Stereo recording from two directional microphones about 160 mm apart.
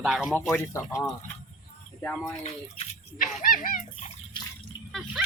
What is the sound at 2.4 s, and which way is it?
Speech, 45° left (ahead or behind).